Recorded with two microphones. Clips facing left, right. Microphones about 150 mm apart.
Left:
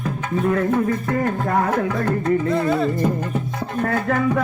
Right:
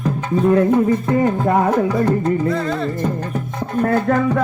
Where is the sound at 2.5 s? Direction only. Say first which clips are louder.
Left 1 dB; 15° left (ahead or behind).